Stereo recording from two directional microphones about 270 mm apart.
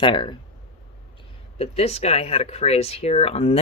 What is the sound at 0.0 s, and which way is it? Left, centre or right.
Speech, centre.